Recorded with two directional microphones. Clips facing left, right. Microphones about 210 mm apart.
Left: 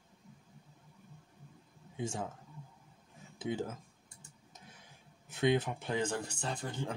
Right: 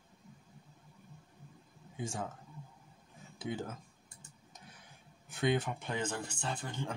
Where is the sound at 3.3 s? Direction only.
25° left (ahead or behind).